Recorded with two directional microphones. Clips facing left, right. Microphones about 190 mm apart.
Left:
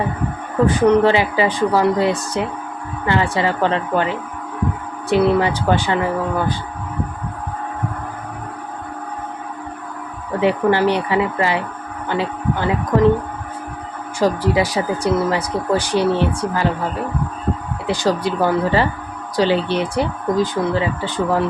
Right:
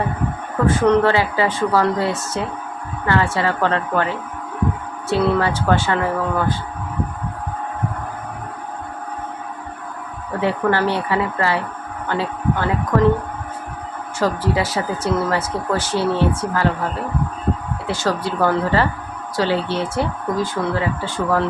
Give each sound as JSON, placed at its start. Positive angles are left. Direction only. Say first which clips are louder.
{"t": 0.7, "sound": "speech", "louder": "left 1 dB", "side_deg": 15}
{"t": 10.4, "sound": "speech", "louder": "left 3 dB", "side_deg": 15}
{"t": 14.2, "sound": "speech", "louder": "left 3 dB", "side_deg": 15}
{"t": 17.8, "sound": "speech", "louder": "left 3 dB", "side_deg": 15}